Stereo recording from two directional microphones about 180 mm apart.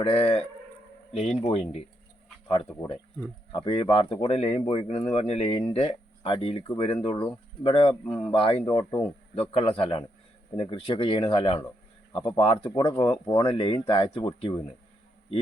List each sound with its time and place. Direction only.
0.0 s speech: 30° left (ahead or behind)
3.5 s speech: 30° left (ahead or behind)